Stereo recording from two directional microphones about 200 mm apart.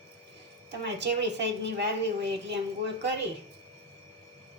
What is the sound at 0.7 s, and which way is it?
A woman's voice, 60° right (ahead or behind).